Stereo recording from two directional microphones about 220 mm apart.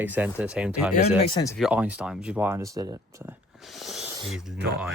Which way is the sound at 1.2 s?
20° left (ahead or behind).